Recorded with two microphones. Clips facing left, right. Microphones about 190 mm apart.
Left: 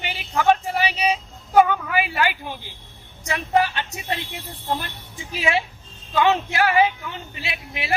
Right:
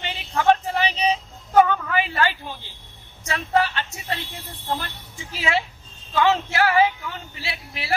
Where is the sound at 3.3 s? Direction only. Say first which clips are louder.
Left 1 dB; 15° left (ahead or behind).